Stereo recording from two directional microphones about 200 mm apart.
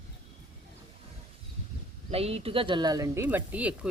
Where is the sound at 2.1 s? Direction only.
30° right (ahead or behind); by 3.9 s 5° right (ahead or behind).